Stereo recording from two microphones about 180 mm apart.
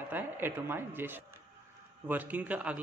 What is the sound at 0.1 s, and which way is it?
Speech, 10° right (ahead or behind).